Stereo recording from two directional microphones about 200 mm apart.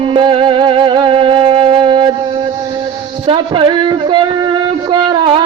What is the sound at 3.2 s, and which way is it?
Music, 25° right (ahead or behind).